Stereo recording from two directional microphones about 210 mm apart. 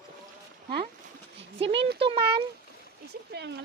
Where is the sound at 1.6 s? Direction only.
60° right (ahead or behind).